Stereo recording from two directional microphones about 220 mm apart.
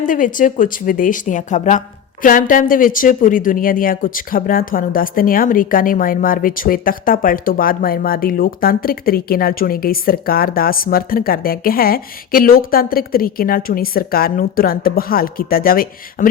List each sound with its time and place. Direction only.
0.0 s speech: 35° left (ahead or behind)